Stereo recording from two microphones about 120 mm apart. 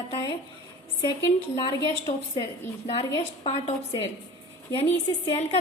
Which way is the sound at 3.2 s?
60° left (ahead or behind).